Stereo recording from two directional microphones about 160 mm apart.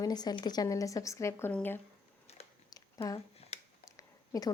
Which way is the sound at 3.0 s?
35° left (ahead or behind).